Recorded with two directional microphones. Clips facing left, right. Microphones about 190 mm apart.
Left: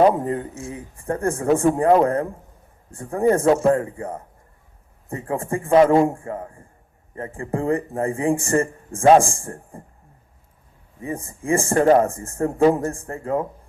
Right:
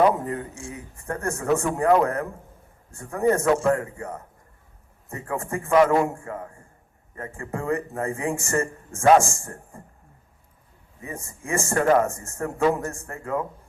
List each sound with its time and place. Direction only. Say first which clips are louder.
0.0 s speech: left 4 dB; 30° left (ahead or behind)
11.0 s speech: left 8 dB; 30° left (ahead or behind)